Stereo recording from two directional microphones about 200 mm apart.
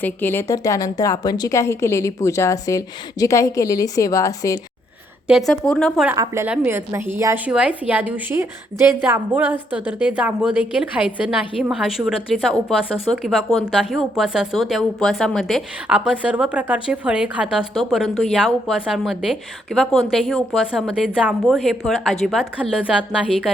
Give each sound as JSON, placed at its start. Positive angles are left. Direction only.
{"t": 0.0, "sound": "speech", "side_deg": 10}
{"t": 5.5, "sound": "a woman's voice", "side_deg": 5}
{"t": 6.1, "sound": "a woman's voice", "side_deg": -10}